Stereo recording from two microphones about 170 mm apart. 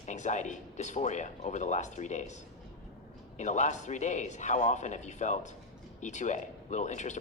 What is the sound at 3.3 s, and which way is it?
Speech, 45° left (ahead or behind).